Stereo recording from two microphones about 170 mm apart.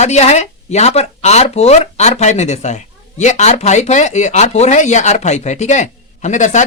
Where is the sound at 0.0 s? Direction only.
40° left (ahead or behind).